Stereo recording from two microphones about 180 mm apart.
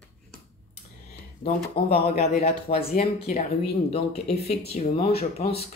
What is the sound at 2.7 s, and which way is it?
Speech, 45° left (ahead or behind).